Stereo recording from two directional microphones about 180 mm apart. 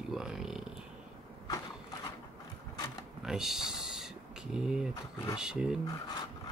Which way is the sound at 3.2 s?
Centre (ahead or behind).